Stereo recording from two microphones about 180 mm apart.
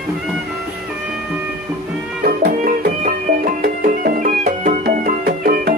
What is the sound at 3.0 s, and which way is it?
Music, 50° right (ahead or behind).